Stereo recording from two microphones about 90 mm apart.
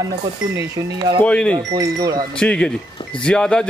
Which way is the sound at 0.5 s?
40° right (ahead or behind).